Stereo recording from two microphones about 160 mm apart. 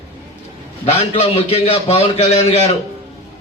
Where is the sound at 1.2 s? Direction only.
40° left (ahead or behind).